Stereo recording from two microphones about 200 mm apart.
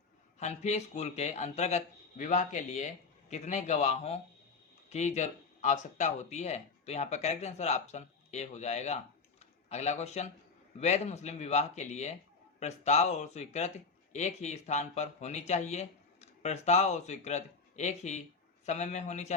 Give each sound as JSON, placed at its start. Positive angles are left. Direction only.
{"t": 0.3, "sound": "speech", "side_deg": 35}